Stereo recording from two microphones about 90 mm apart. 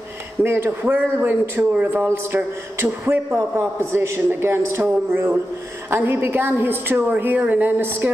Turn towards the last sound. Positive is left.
turn(degrees=-20)  # may be behind; listen again after turning